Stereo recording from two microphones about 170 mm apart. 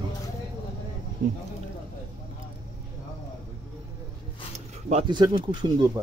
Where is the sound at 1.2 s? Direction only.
55° right (ahead or behind).